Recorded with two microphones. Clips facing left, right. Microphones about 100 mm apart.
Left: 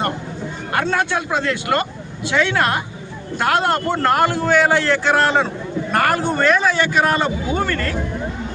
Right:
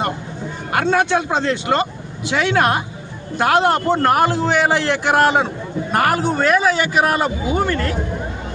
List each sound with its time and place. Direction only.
0.7 s a man's voice: 15° right (ahead or behind)